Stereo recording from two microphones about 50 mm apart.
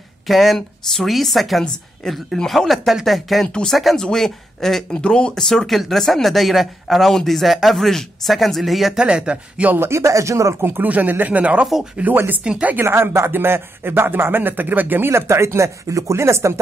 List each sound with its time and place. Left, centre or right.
0.3 s speech: centre
3.9 s speech: centre
4.9 s speech: centre
8.9 s speech: right
9.8 s speech: right
10.8 s speech: right
11.6 s speech: centre
12.0 s speech: right
12.8 s a man's voice: right
15.0 s speech: right